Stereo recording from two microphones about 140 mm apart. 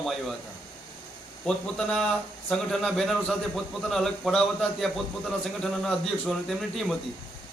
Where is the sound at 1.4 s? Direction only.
5° left (ahead or behind).